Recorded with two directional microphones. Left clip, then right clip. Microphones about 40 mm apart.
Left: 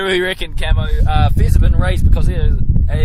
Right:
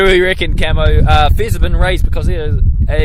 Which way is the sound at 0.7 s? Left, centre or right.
Right.